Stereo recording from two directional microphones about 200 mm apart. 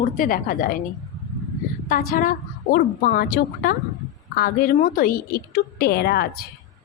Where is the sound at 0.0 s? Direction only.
45° left (ahead or behind).